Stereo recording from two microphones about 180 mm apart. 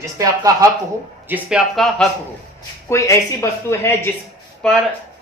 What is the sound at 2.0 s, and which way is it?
Speech, centre (ahead or behind).